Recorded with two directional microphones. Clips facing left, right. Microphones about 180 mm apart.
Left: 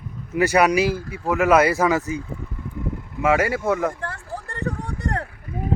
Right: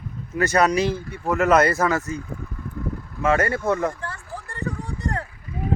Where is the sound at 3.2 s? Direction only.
10° left (ahead or behind).